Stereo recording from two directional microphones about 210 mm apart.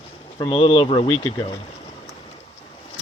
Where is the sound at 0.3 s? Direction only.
25° left (ahead or behind).